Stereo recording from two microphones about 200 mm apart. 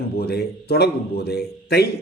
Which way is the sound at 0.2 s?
55° left (ahead or behind).